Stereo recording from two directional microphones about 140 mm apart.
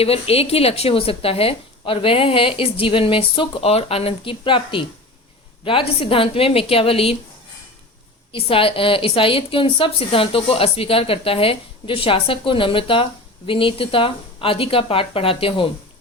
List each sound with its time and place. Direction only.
0.0 s a woman's voice: 45° left (ahead or behind)
8.3 s a woman's voice: 40° left (ahead or behind)